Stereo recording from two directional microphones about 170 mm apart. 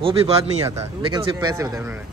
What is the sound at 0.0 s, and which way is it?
Speech, 35° right (ahead or behind).